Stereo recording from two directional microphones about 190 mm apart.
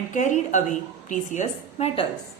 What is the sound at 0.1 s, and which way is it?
A woman's voice, 40° left (ahead or behind).